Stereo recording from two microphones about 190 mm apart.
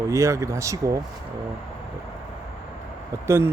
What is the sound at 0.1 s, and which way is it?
Speech, 15° right (ahead or behind).